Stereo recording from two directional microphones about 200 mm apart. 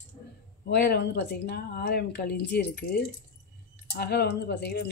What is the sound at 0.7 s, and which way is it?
Speech, 55° left (ahead or behind).